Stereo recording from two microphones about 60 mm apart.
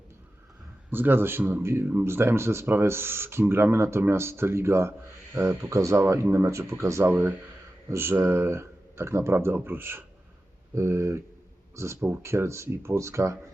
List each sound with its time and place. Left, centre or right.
0.9 s speech: right
1.6 s speech: right
1.9 s speech: right
5.7 s speech: right
7.0 s speech: right